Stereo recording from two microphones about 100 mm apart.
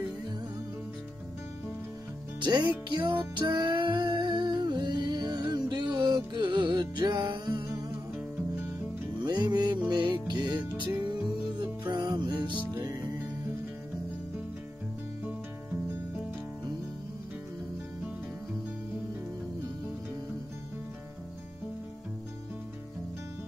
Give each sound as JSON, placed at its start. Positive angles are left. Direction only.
{"t": 2.4, "sound": "music", "side_deg": -50}
{"t": 9.2, "sound": "music", "side_deg": -45}
{"t": 11.9, "sound": "music", "side_deg": -45}